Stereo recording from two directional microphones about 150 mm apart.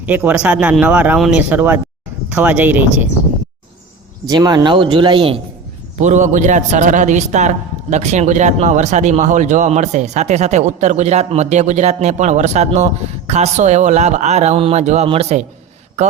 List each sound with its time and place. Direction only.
0.0 s speech: 10° right (ahead or behind)
4.3 s speech: 25° right (ahead or behind)
6.0 s a man's voice: 55° right (ahead or behind)
16.0 s a sound: 50° right (ahead or behind)